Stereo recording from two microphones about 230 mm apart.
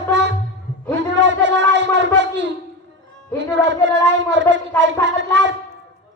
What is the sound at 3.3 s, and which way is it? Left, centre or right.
Speech, right.